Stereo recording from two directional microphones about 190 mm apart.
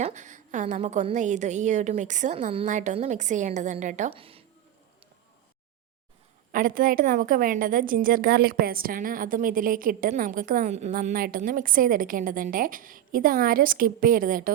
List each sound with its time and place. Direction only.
0.0 s a woman's voice: 40° right (ahead or behind)
6.5 s a woman's voice: 45° right (ahead or behind)